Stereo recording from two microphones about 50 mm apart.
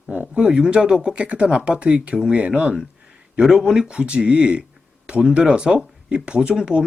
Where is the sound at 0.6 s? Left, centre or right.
Centre.